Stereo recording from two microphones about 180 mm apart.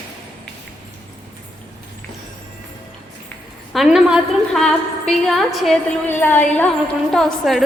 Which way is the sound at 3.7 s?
Centre (ahead or behind).